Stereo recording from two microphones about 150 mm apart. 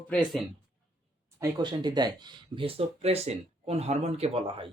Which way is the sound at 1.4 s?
30° right (ahead or behind).